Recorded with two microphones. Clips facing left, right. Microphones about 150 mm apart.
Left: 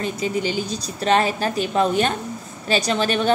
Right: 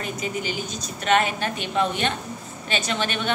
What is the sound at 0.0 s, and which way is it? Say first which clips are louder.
A woman's voice: left 5 dB; 35° left (ahead or behind).